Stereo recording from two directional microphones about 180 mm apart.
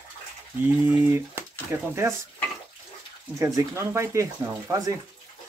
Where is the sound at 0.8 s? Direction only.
10° right (ahead or behind).